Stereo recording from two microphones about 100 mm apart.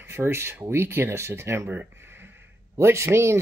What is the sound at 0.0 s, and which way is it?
Speech, 25° right (ahead or behind).